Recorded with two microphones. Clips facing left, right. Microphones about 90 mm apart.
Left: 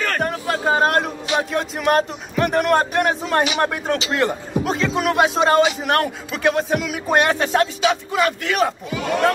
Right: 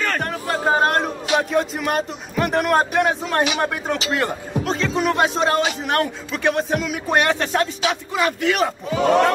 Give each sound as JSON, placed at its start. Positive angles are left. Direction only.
{"t": 0.0, "sound": "speech", "side_deg": 0}
{"t": 8.9, "sound": "speech", "side_deg": -35}